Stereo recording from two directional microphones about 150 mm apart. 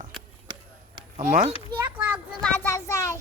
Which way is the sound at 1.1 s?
50° right (ahead or behind).